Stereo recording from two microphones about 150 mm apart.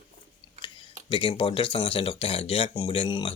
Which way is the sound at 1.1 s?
35° left (ahead or behind).